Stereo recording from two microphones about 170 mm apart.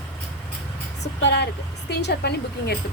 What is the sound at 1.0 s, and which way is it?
Speech, 80° left.